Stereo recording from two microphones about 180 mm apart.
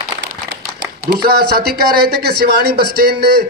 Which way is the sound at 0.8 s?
65° right (ahead or behind).